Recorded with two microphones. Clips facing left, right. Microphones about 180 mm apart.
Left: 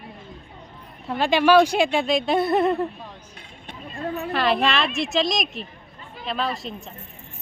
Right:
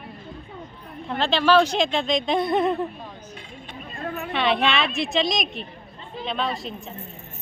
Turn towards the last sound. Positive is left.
turn(degrees=0)  # may be behind; listen again after turning